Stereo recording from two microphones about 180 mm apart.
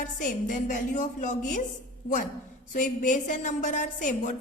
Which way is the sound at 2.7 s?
45° left (ahead or behind).